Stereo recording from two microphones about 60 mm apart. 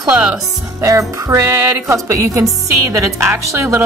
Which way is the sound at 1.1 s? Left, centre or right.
Right.